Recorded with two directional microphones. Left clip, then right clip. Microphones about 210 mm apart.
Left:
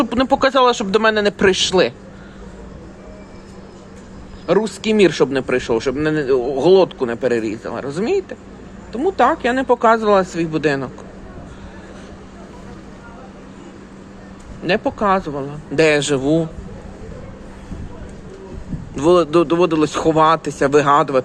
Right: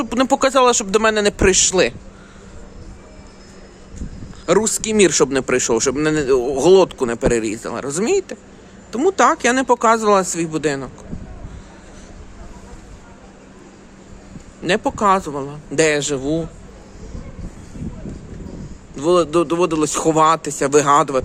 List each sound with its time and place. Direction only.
0.0 s speech: 15° right (ahead or behind)
4.4 s a man's voice: 30° right (ahead or behind)
8.9 s a man's voice: 40° right (ahead or behind); by 10.9 s 10° right (ahead or behind)
14.6 s speech: 25° right (ahead or behind); by 16.5 s centre (ahead or behind)
18.9 s speech: 5° right (ahead or behind)